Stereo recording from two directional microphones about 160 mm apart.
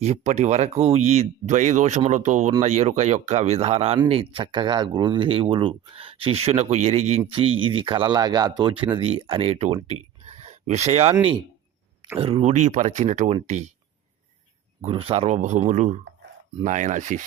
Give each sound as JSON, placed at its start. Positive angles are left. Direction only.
{"t": 0.0, "sound": "speech", "side_deg": -45}
{"t": 14.8, "sound": "speech", "side_deg": -40}